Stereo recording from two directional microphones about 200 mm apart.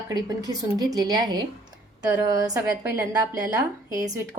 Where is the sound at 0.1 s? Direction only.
20° right (ahead or behind).